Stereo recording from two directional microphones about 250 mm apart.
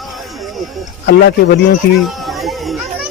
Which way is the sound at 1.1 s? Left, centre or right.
Left.